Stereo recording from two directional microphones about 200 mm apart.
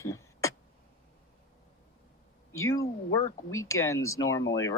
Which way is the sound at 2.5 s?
15° left (ahead or behind).